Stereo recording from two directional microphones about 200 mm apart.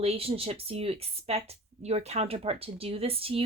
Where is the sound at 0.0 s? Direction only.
30° right (ahead or behind).